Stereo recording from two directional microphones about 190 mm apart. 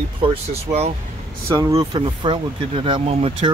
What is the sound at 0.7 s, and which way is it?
Speech, 15° right (ahead or behind).